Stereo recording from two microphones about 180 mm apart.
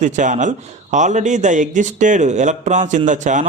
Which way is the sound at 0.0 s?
45° right (ahead or behind).